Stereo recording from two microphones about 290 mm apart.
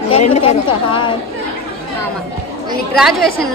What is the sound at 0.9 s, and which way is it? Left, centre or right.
Speech, centre.